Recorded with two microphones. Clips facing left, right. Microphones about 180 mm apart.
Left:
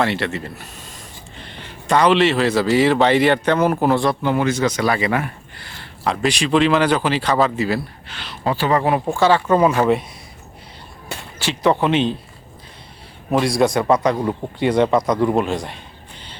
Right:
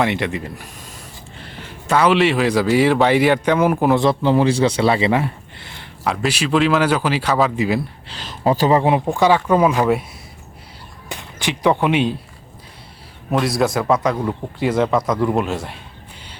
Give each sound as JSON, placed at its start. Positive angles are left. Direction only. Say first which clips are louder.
{"t": 0.0, "sound": "a man's voice", "louder": "right 1 dB", "side_deg": -15}
{"t": 3.9, "sound": "speech", "louder": "right 3 dB", "side_deg": -25}
{"t": 6.1, "sound": "a man's voice", "louder": "left 1 dB", "side_deg": -5}
{"t": 7.5, "sound": "speech", "louder": "right 1 dB", "side_deg": -15}
{"t": 8.0, "sound": "speech", "louder": "right 1 dB", "side_deg": -40}
{"t": 8.7, "sound": "speech", "louder": "right 2 dB", "side_deg": -20}
{"t": 11.1, "sound": "speech", "louder": "right 1 dB", "side_deg": -15}
{"t": 13.3, "sound": "a man's voice", "louder": "left 2 dB", "side_deg": 0}